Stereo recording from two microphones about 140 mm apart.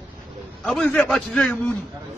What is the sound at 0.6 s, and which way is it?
Speech, 5° left (ahead or behind).